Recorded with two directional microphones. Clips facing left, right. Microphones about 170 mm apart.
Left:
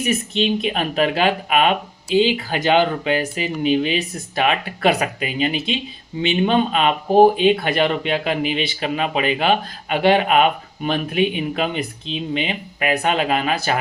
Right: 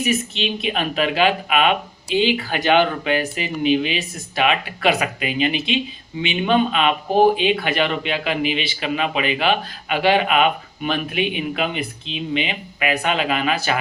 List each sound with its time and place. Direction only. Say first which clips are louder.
0.3 s a man's voice: left 4 dB; 40° left (ahead or behind)